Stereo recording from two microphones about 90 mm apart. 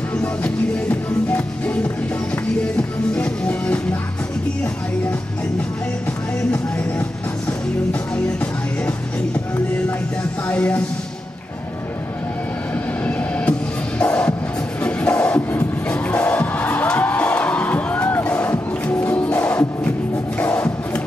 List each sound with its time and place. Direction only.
0.1 s music: 15° left (ahead or behind)
3.2 s music: 15° left (ahead or behind)
7.9 s music: 15° left (ahead or behind)
10.5 s speech: 15° left (ahead or behind)
13.0 s music: 15° left (ahead or behind)